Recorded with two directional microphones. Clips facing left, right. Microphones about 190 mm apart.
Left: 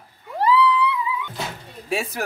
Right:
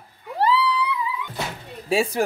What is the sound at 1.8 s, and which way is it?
Speech, 30° right (ahead or behind).